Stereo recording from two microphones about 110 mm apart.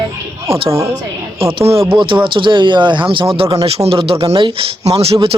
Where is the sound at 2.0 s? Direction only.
50° right (ahead or behind).